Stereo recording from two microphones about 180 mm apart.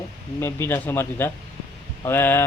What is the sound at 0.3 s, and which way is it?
Speech, 15° left (ahead or behind).